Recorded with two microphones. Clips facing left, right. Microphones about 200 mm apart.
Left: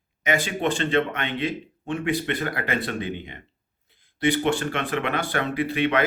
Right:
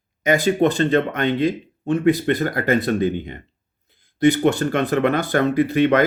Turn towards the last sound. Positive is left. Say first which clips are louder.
# right 7 dB
turn(degrees=-40)  # may be behind; listen again after turning